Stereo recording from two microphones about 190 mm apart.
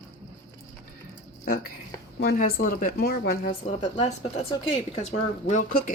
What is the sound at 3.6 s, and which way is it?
Speech, 40° left (ahead or behind).